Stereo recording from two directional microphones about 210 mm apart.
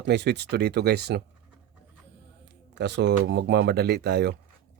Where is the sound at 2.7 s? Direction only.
55° right (ahead or behind).